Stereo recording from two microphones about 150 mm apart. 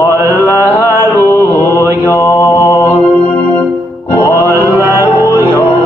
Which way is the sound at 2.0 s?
15° left (ahead or behind).